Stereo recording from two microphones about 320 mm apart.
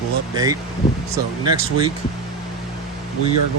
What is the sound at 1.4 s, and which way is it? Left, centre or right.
Speech, centre.